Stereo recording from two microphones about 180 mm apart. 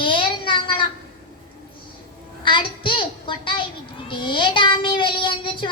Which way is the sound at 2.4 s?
25° left (ahead or behind).